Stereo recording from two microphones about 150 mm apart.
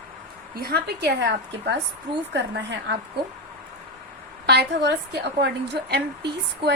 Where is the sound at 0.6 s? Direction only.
90° right.